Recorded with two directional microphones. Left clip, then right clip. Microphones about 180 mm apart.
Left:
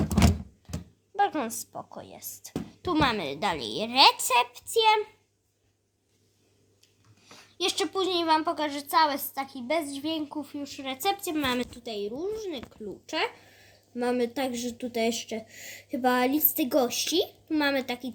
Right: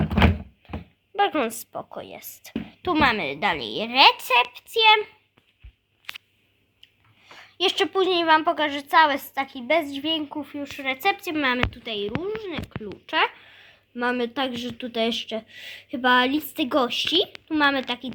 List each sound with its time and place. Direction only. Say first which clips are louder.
0.6 s a sound: right 5 dB; 10° right (ahead or behind)
1.1 s speech: right 4 dB; 15° right (ahead or behind); by 4.9 s centre (ahead or behind)
7.3 s a woman's voice: right 6 dB; 20° right (ahead or behind); by 12.6 s centre (ahead or behind)
12.8 s a woman's voice: right 7 dB; 10° right (ahead or behind)